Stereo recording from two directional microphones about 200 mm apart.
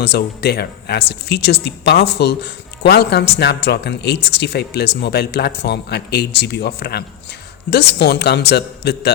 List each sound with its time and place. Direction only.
0.0 s speech: 55° left (ahead or behind)